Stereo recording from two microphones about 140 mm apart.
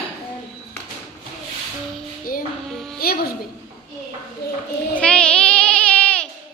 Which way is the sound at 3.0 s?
90° left.